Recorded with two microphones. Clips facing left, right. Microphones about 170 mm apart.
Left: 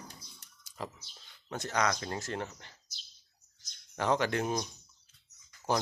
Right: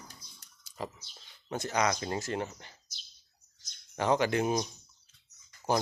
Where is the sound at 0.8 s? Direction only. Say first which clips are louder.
Right 2 dB; centre (ahead or behind).